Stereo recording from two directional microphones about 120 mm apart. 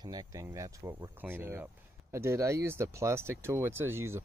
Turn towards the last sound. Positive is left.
turn(degrees=-20)  # may be behind; listen again after turning